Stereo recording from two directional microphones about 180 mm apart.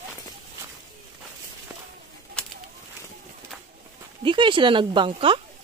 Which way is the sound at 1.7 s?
10° right (ahead or behind).